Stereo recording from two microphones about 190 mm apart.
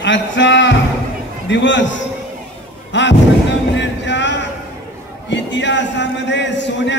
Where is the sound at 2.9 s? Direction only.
70° left (ahead or behind).